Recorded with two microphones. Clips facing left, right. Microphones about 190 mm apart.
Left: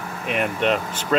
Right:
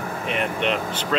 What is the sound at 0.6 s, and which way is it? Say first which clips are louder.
Speech: left 2 dB; 45° left (ahead or behind).